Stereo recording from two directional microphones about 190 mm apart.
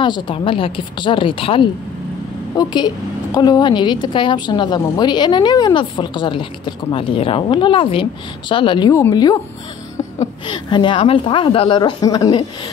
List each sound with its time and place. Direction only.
0.0 s a woman's voice: 25° left (ahead or behind)
10.4 s a woman's voice: 25° left (ahead or behind)